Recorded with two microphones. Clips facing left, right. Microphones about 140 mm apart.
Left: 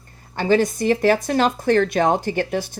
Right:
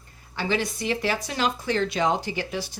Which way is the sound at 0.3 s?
45° left (ahead or behind).